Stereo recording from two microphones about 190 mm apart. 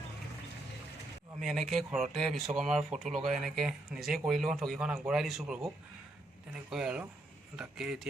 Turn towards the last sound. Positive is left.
turn(degrees=-5)  # may be behind; listen again after turning